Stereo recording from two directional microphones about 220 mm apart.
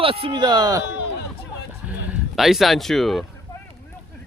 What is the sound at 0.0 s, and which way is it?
Speech, 25° right (ahead or behind).